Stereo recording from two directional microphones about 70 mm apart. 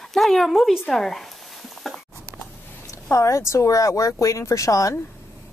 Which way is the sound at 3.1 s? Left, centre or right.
Left.